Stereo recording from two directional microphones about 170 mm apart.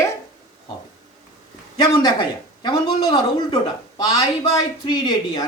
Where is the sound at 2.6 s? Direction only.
25° left (ahead or behind).